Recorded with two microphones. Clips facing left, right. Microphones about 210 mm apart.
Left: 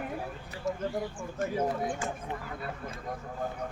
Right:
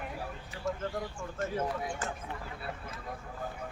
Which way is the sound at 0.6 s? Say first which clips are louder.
Left 2 dB; centre (ahead or behind).